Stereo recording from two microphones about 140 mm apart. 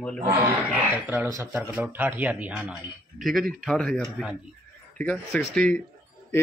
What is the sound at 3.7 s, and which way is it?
A man's voice, 5° left (ahead or behind).